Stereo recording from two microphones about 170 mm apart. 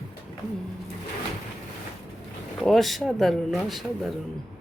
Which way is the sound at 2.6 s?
Centre (ahead or behind).